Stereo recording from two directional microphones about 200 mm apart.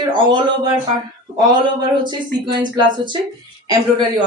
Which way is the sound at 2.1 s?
25° right (ahead or behind).